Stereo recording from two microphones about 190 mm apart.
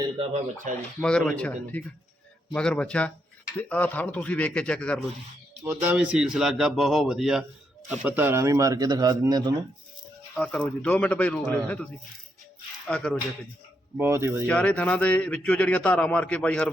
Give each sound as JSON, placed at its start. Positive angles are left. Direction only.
{"t": 0.7, "sound": "speech", "side_deg": -40}
{"t": 1.0, "sound": "speech", "side_deg": 5}
{"t": 5.6, "sound": "speech", "side_deg": -10}
{"t": 10.3, "sound": "speech", "side_deg": 5}
{"t": 12.9, "sound": "speech", "side_deg": 5}
{"t": 13.9, "sound": "speech", "side_deg": -15}
{"t": 14.4, "sound": "speech", "side_deg": 5}